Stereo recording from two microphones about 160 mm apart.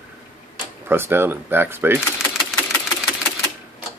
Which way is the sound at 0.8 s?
15° right (ahead or behind).